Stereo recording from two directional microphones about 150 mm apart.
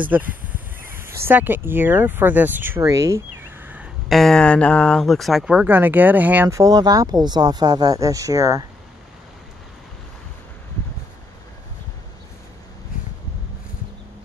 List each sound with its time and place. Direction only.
0.0 s speech: 10° right (ahead or behind)
4.1 s speech: centre (ahead or behind); by 8.6 s 20° right (ahead or behind)
12.9 s a sound: 65° left (ahead or behind)